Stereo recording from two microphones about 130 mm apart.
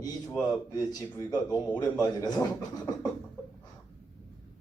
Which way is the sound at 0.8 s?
30° left (ahead or behind).